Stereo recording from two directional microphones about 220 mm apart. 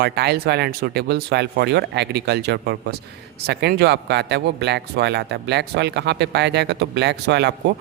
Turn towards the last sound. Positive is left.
turn(degrees=-50)  # may be behind; listen again after turning